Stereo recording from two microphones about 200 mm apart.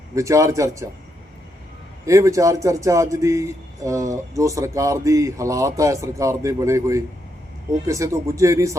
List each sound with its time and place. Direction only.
0.1 s a man's voice: 15° right (ahead or behind)
2.0 s a man's voice: 15° right (ahead or behind)